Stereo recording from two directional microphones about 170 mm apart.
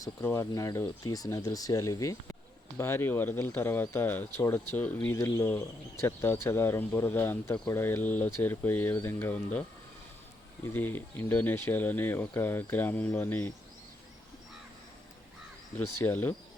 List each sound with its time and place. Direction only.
0.0 s speech: 15° left (ahead or behind)
10.7 s speech: 10° left (ahead or behind)
16.0 s speech: 10° left (ahead or behind)